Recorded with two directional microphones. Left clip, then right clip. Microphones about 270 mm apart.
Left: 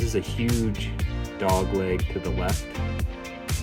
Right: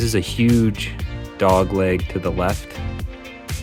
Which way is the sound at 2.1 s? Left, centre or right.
Right.